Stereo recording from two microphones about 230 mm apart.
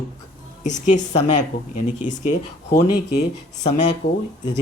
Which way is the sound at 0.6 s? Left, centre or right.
Left.